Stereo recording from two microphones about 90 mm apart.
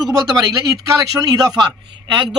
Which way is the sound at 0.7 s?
40° right (ahead or behind).